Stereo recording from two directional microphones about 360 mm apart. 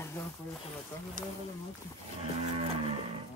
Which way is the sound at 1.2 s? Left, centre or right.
Right.